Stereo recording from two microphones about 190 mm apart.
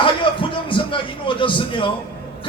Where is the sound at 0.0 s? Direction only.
25° left (ahead or behind).